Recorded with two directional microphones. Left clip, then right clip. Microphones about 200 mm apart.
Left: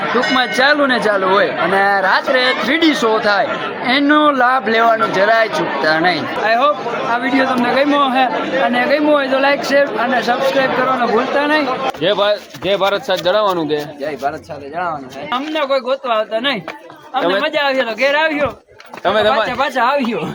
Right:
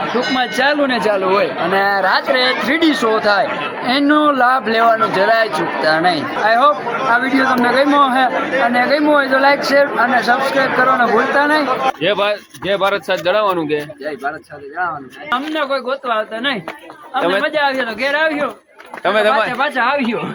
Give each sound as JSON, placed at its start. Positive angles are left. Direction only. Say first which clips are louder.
{"t": 0.3, "sound": "speech", "louder": "left 2 dB", "side_deg": 0}
{"t": 11.9, "sound": "speech", "louder": "left 1 dB", "side_deg": -5}
{"t": 14.8, "sound": "speech", "louder": "even", "side_deg": 5}
{"t": 19.0, "sound": "speech", "louder": "even", "side_deg": -10}
{"t": 19.5, "sound": "speech", "louder": "even", "side_deg": 10}
{"t": 19.7, "sound": "speech", "louder": "left 1 dB", "side_deg": 25}